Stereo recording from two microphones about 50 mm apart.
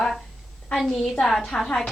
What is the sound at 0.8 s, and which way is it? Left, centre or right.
Speech, centre.